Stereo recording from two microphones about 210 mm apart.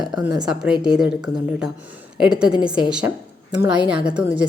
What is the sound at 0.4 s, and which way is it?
Speech, 5° right (ahead or behind).